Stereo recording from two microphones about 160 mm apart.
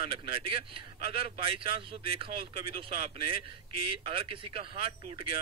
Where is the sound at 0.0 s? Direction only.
35° right (ahead or behind).